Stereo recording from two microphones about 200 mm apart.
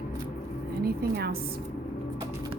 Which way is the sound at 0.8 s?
50° right (ahead or behind).